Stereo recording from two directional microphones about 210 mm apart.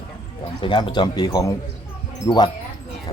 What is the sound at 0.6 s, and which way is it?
A man's voice, 20° left (ahead or behind).